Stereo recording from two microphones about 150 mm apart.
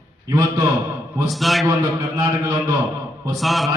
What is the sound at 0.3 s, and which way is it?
Speech, 25° right (ahead or behind).